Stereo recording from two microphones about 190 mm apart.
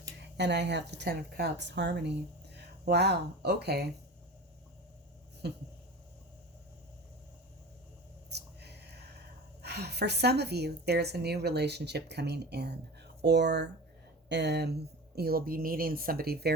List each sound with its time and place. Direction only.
0.2 s speech: 65° right (ahead or behind)
5.4 s a woman's voice: 60° right (ahead or behind)
8.3 s a sound: 60° right (ahead or behind)
9.6 s a woman's voice: 60° right (ahead or behind)